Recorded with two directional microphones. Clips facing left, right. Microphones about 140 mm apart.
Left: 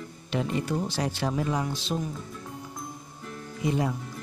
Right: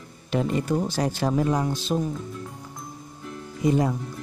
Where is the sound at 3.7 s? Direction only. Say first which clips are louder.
Right 5 dB; 40° right (ahead or behind).